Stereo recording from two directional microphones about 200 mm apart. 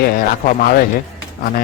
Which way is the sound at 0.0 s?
45° left (ahead or behind).